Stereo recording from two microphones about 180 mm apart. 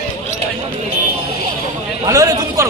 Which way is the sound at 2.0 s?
20° right (ahead or behind).